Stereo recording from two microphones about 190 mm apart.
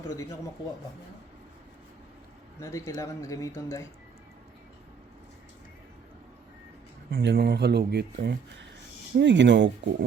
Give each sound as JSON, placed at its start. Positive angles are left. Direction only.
{"t": 0.1, "sound": "speech", "side_deg": 15}
{"t": 2.6, "sound": "speech", "side_deg": 15}
{"t": 7.1, "sound": "speech", "side_deg": -60}